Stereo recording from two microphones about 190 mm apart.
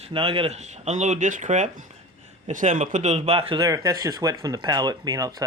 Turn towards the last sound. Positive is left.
turn(degrees=-20)  # may be behind; listen again after turning